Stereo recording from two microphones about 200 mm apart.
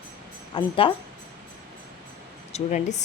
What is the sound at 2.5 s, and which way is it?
Speech, 35° left (ahead or behind).